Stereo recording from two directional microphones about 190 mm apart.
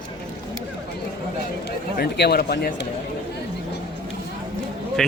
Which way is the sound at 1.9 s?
60° left (ahead or behind).